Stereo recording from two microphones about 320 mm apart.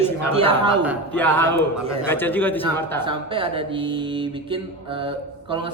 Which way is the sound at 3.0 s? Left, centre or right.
Centre.